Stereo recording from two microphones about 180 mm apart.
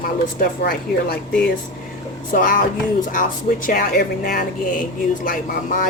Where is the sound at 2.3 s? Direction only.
50° left (ahead or behind).